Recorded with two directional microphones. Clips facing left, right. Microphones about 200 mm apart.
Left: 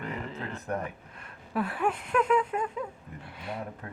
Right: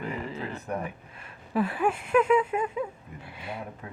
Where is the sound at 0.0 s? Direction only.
5° right (ahead or behind).